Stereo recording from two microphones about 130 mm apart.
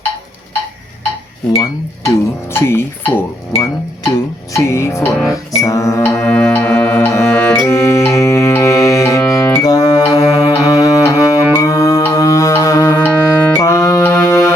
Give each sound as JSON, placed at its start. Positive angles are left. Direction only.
{"t": 1.5, "sound": "speech", "side_deg": 25}
{"t": 5.5, "sound": "music", "side_deg": 25}